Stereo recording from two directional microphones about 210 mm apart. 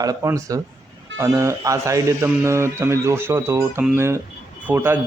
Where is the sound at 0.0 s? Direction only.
15° right (ahead or behind).